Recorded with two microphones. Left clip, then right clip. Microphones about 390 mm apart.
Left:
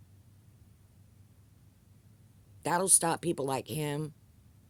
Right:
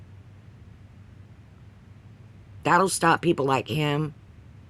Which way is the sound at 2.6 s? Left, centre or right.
Left.